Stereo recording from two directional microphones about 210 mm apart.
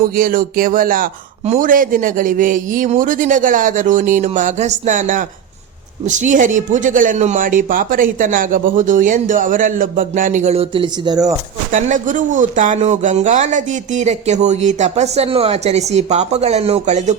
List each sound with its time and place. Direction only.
0.2 s speech: 40° right (ahead or behind); by 11.3 s 20° right (ahead or behind)
11.7 s speech: 35° right (ahead or behind)